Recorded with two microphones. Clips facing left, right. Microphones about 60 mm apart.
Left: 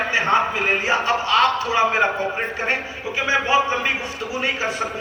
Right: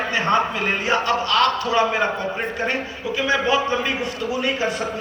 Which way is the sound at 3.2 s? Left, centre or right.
Left.